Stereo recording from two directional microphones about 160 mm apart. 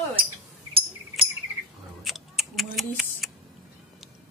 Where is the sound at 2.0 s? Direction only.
Centre (ahead or behind).